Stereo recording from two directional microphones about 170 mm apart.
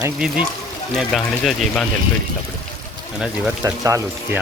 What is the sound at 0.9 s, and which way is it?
Speech, centre (ahead or behind).